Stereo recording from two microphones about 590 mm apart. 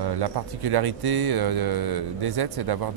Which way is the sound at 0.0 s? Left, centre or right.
Right.